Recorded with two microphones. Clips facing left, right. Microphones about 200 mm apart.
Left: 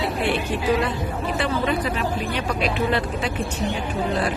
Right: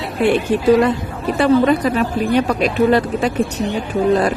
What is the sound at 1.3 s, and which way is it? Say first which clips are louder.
Speech: right 11 dB; 40° right (ahead or behind).